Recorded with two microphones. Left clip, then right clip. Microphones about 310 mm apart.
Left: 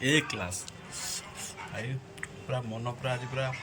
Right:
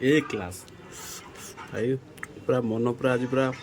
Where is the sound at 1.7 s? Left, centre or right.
Centre.